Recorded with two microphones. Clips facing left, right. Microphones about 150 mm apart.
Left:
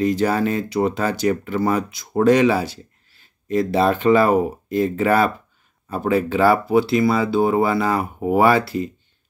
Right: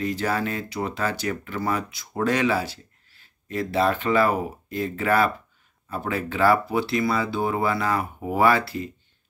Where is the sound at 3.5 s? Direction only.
25° left (ahead or behind).